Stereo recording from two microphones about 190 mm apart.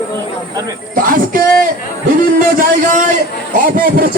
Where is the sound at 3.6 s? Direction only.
50° right (ahead or behind).